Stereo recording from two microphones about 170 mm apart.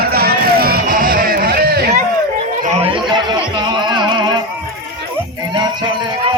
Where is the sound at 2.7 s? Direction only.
35° right (ahead or behind).